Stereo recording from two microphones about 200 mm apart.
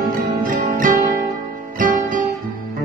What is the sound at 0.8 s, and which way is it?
Music, 45° right (ahead or behind).